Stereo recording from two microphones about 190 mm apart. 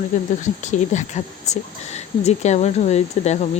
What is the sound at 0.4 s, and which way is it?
Speech, 40° left (ahead or behind).